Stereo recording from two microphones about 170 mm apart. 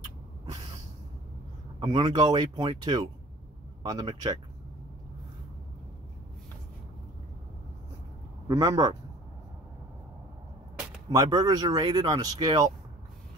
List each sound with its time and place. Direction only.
1.8 s speech: 30° right (ahead or behind)
8.5 s speech: 20° right (ahead or behind)
11.1 s speech: 25° right (ahead or behind)